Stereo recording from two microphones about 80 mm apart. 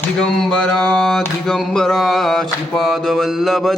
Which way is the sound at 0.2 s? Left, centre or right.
Centre.